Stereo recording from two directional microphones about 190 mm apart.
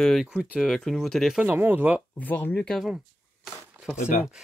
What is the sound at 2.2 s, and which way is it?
Speech, 10° left (ahead or behind).